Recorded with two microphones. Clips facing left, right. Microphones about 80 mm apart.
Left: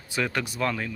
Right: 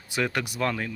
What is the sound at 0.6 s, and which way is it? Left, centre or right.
Speech, right.